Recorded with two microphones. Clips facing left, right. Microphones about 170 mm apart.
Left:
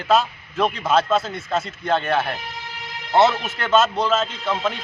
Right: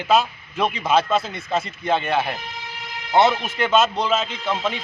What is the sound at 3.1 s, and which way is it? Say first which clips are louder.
Speech: even; 15° right (ahead or behind).